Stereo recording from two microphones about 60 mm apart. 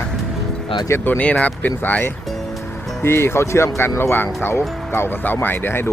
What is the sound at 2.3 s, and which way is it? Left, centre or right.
Music, centre.